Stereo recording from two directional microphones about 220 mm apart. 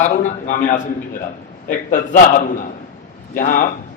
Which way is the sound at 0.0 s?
35° left (ahead or behind).